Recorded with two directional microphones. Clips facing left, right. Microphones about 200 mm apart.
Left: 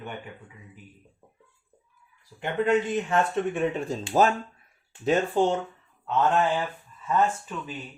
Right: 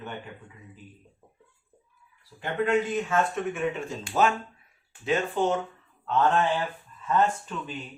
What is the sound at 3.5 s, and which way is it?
Speech, 35° left (ahead or behind).